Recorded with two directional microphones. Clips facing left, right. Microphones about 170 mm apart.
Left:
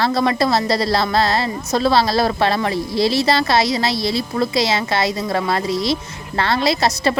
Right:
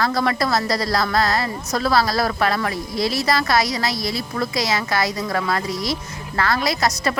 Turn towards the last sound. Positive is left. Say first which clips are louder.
# left 4 dB
turn(degrees=30)  # may be behind; listen again after turning